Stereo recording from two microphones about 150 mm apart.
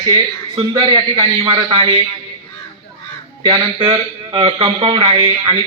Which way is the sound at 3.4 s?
35° right (ahead or behind).